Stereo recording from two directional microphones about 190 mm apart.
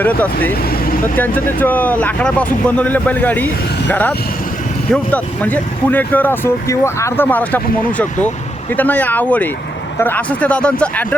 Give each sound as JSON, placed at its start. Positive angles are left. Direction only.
{"t": 0.0, "sound": "speech", "side_deg": 10}